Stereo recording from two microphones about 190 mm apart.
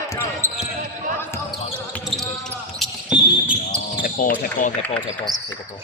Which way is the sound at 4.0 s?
45° left (ahead or behind).